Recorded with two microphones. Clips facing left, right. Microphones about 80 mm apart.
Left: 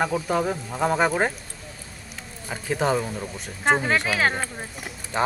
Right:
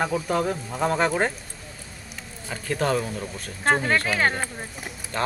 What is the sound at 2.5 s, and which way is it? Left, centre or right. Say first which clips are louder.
Speech: left 1 dB; centre.